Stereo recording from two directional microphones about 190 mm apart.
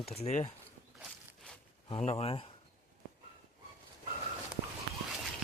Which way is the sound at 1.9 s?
30° left (ahead or behind).